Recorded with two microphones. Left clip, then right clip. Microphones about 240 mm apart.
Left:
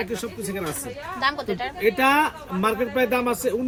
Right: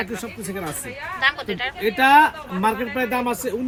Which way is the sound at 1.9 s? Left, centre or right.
Right.